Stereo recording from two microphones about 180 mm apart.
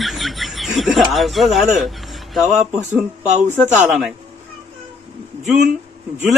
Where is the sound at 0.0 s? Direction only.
Centre (ahead or behind).